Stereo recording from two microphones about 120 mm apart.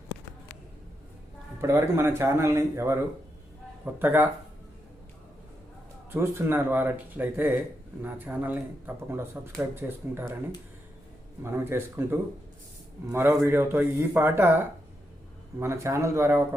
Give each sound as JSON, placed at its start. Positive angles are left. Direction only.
{"t": 1.6, "sound": "a man's voice", "side_deg": -20}
{"t": 3.9, "sound": "speech", "side_deg": -15}
{"t": 6.1, "sound": "speech", "side_deg": -20}
{"t": 11.4, "sound": "a man's voice", "side_deg": -20}